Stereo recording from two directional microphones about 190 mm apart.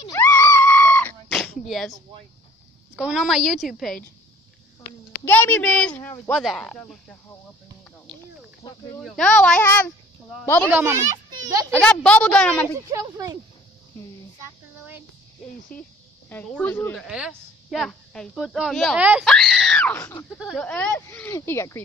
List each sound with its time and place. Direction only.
0.2 s screaming: 15° left (ahead or behind)
1.4 s a sound: centre (ahead or behind)
3.0 s a woman's voice: 5° right (ahead or behind)
5.2 s a woman's voice: 10° left (ahead or behind)
8.6 s speech: 25° left (ahead or behind)
9.0 s a woman's voice: centre (ahead or behind)
10.7 s speech: 10° right (ahead or behind)
11.7 s a woman's voice: 5° left (ahead or behind)
12.7 s speech: 15° right (ahead or behind)
15.7 s speech: 5° left (ahead or behind)
17.0 s a woman's voice: 5° right (ahead or behind); by 20.2 s 15° left (ahead or behind)
20.3 s speech: centre (ahead or behind)